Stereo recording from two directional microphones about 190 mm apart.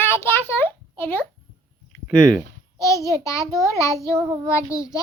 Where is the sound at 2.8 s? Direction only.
15° left (ahead or behind).